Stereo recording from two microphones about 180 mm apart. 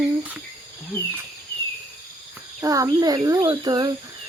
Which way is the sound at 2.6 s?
20° right (ahead or behind).